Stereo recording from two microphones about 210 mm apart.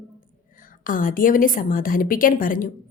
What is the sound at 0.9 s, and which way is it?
A woman's voice, 40° left (ahead or behind).